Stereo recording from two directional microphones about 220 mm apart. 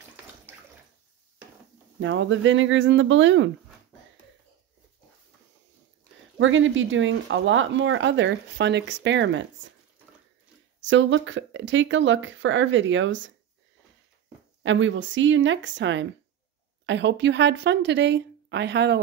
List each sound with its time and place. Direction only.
2.0 s speech: 60° right (ahead or behind)
6.3 s speech: 60° right (ahead or behind)
10.8 s speech: 55° right (ahead or behind)
14.6 s speech: 60° right (ahead or behind)